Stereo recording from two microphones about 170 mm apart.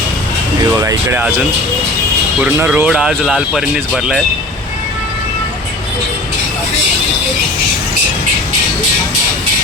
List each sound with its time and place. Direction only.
0.6 s speech: 20° right (ahead or behind)
2.4 s speech: 10° right (ahead or behind)